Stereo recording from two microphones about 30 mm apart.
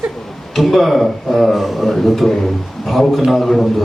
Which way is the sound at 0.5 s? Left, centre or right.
Centre.